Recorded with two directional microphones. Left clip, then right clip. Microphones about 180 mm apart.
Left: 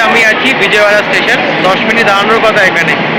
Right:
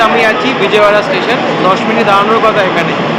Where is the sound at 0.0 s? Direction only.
10° right (ahead or behind).